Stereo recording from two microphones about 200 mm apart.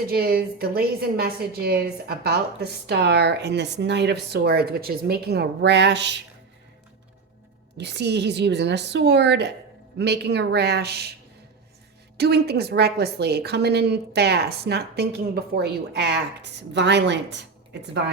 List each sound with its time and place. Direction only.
0.1 s a woman's voice: 50° right (ahead or behind)
7.8 s a woman's voice: 60° right (ahead or behind)
12.1 s a woman's voice: 55° right (ahead or behind)